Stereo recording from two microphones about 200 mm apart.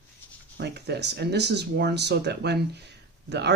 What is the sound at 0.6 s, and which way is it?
Speech, 55° right (ahead or behind).